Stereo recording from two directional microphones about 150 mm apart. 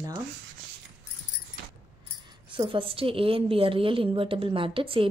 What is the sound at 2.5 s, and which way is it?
A woman's voice, 35° right (ahead or behind).